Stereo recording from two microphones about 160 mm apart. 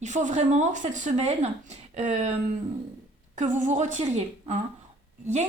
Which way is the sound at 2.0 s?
45° right (ahead or behind).